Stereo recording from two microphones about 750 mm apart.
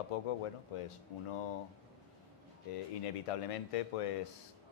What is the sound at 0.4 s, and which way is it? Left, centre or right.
Speech, left.